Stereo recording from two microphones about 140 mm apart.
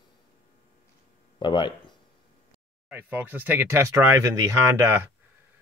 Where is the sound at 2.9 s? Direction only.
10° right (ahead or behind).